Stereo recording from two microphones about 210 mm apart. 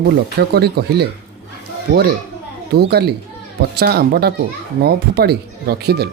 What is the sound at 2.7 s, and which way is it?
Speech, 50° right (ahead or behind).